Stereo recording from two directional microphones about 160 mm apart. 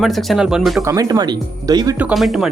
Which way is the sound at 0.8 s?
20° right (ahead or behind).